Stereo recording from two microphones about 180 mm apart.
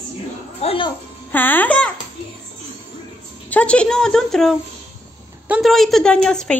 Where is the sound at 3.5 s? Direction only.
5° left (ahead or behind).